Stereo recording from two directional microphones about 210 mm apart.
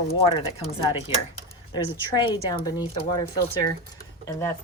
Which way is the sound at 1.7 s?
25° left (ahead or behind).